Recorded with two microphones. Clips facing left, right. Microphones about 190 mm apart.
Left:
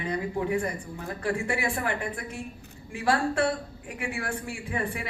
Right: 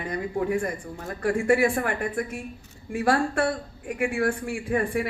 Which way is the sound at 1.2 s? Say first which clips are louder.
Right 8 dB; 45° right (ahead or behind).